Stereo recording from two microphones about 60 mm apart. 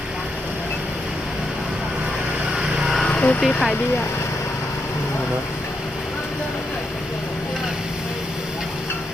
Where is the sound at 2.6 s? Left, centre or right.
Centre.